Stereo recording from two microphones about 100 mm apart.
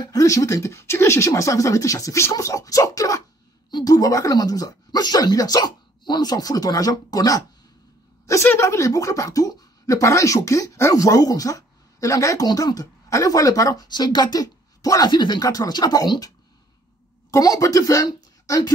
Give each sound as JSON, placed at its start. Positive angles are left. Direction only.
{"t": 0.0, "sound": "speech", "side_deg": 35}
{"t": 8.3, "sound": "speech", "side_deg": 25}
{"t": 17.3, "sound": "a woman's voice", "side_deg": 35}